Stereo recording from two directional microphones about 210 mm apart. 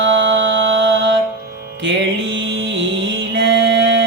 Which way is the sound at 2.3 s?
60° right (ahead or behind).